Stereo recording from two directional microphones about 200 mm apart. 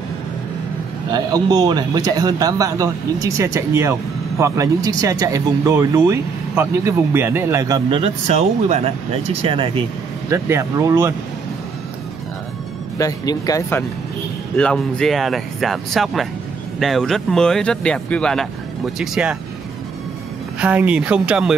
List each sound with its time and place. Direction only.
1.1 s speech: 20° right (ahead or behind)
8.0 s speech: 35° right (ahead or behind)
10.3 s speech: 15° right (ahead or behind)
12.9 s speech: 20° left (ahead or behind); by 19.3 s 5° right (ahead or behind)
20.6 s speech: 5° right (ahead or behind)